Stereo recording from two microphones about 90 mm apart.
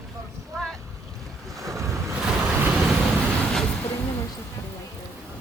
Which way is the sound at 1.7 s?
35° right (ahead or behind).